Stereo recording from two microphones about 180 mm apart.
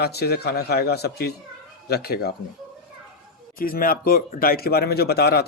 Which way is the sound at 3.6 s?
55° left (ahead or behind).